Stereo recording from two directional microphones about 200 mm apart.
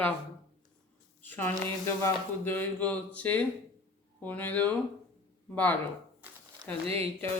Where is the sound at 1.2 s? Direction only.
10° left (ahead or behind).